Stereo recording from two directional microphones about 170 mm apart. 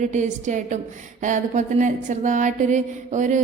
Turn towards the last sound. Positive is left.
turn(degrees=-45)  # may be behind; listen again after turning